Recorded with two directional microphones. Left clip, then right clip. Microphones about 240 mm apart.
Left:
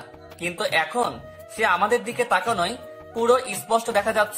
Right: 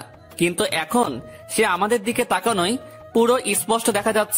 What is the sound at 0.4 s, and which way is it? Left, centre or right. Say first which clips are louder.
Speech: right 2 dB; right.